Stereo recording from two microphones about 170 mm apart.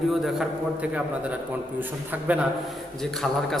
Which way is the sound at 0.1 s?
5° right (ahead or behind).